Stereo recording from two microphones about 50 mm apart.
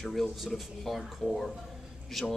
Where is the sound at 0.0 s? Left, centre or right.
Centre.